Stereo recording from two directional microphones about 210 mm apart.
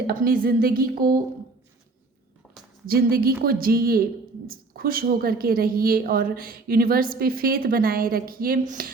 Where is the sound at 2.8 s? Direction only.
45° right (ahead or behind).